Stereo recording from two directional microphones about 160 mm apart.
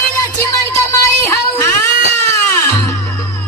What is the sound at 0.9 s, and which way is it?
Music, 15° left (ahead or behind).